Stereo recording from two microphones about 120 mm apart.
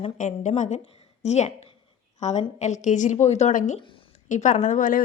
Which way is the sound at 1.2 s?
70° left (ahead or behind).